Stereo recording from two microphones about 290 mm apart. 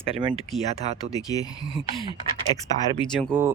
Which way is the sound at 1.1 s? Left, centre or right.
Centre.